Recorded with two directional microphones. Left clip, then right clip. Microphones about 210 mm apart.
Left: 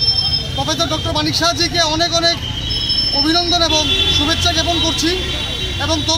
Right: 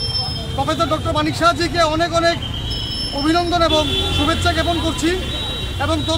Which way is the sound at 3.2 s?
5° right (ahead or behind).